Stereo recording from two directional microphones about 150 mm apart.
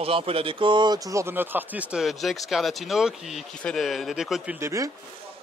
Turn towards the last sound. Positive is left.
turn(degrees=-20)  # may be behind; listen again after turning